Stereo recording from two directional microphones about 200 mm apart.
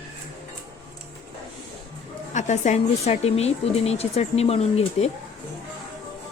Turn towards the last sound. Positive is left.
turn(degrees=30)  # may be behind; listen again after turning